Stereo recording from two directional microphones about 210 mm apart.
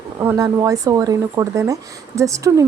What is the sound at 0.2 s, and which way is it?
Speech, 10° right (ahead or behind).